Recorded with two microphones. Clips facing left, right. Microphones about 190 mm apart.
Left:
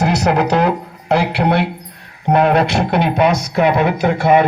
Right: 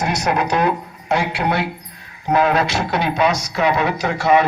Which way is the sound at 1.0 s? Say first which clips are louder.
Left 4 dB; 65° left (ahead or behind).